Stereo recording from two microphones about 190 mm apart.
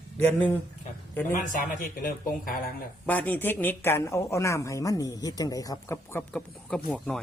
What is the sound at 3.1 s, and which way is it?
A woman's voice, 10° left (ahead or behind).